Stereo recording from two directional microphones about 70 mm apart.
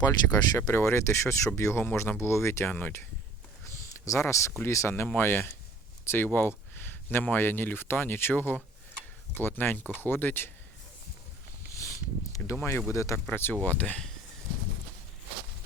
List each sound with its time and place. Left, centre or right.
0.0 s speech: left
0.7 s speech: left
3.7 s speech: left
11.7 s a sound: left
12.9 s speech: left
13.5 s speech: left